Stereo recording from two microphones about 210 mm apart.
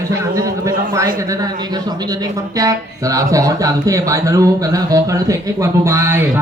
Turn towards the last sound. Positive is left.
turn(degrees=-10)  # may be behind; listen again after turning